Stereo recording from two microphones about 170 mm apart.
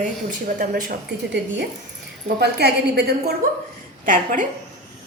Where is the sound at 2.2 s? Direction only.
75° right (ahead or behind).